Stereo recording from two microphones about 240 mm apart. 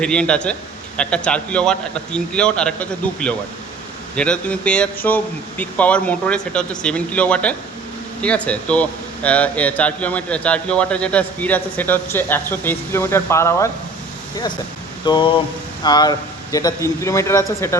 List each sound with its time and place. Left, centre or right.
0.0 s speech: centre
15.0 s a sound: centre
15.8 s a man's voice: centre